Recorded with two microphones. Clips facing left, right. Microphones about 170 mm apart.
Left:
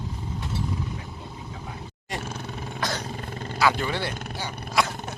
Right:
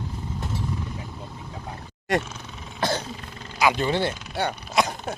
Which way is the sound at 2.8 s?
30° right (ahead or behind).